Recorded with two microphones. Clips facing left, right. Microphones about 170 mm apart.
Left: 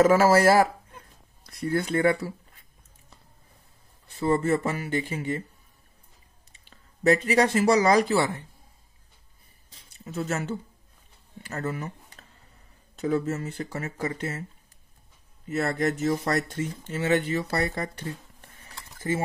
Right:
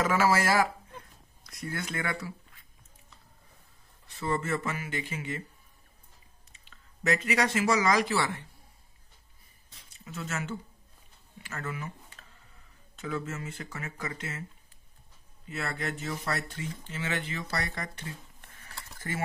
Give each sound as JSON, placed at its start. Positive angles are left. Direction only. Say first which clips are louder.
{"t": 0.0, "sound": "speech", "louder": "left 8 dB", "side_deg": 40}
{"t": 4.2, "sound": "speech", "louder": "left 7 dB", "side_deg": 35}
{"t": 6.7, "sound": "speech", "louder": "left 8 dB", "side_deg": 35}
{"t": 9.9, "sound": "speech", "louder": "left 7 dB", "side_deg": 40}
{"t": 15.4, "sound": "speech", "louder": "left 9 dB", "side_deg": 40}